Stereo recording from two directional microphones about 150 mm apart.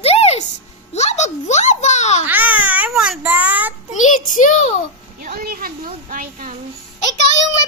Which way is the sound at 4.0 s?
60° left (ahead or behind).